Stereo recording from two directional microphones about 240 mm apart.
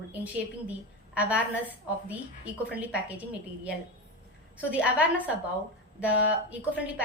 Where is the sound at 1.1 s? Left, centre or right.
Centre.